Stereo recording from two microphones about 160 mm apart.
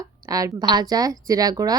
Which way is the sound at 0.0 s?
20° right (ahead or behind).